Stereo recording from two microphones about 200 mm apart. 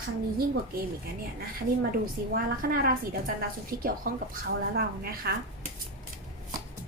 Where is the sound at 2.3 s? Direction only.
45° right (ahead or behind).